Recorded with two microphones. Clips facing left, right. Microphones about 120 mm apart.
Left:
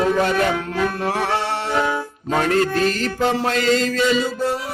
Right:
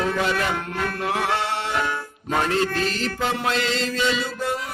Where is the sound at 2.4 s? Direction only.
45° left (ahead or behind).